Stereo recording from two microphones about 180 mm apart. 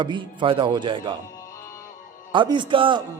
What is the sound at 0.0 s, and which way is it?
A man's voice, 25° right (ahead or behind).